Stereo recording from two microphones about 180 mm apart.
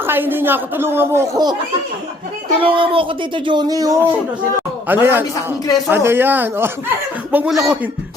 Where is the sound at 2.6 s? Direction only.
30° right (ahead or behind); by 7.7 s centre (ahead or behind).